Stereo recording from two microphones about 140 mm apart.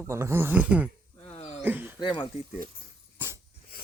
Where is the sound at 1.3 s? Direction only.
50° left (ahead or behind).